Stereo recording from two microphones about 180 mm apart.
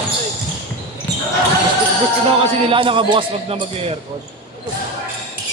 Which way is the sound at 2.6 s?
30° right (ahead or behind).